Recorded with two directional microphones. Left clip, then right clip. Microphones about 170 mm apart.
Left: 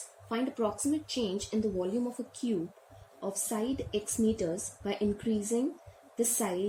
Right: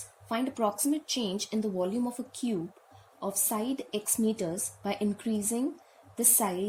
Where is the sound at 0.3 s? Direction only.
70° right (ahead or behind).